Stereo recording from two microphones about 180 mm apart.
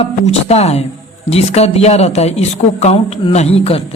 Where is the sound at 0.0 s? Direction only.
35° left (ahead or behind).